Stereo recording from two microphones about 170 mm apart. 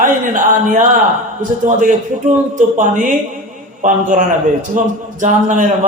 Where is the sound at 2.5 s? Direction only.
50° right (ahead or behind).